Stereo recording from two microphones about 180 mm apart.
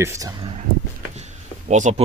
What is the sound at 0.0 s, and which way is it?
Speech, 15° right (ahead or behind).